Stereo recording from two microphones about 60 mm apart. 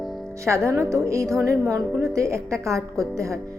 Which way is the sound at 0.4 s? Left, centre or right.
Right.